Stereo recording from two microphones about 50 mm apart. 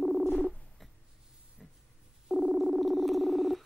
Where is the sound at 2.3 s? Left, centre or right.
Centre.